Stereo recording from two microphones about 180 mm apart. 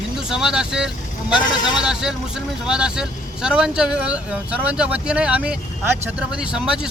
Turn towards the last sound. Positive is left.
turn(degrees=-5)  # may be behind; listen again after turning